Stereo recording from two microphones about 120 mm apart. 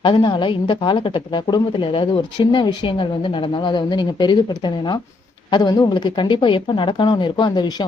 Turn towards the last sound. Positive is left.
turn(degrees=35)  # may be behind; listen again after turning